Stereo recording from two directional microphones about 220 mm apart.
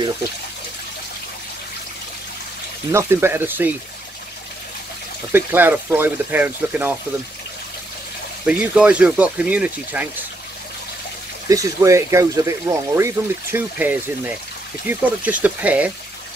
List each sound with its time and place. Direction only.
2.9 s speech: 10° right (ahead or behind)
5.3 s speech: 10° right (ahead or behind)
8.5 s speech: 5° right (ahead or behind)
11.4 s speech: 15° right (ahead or behind)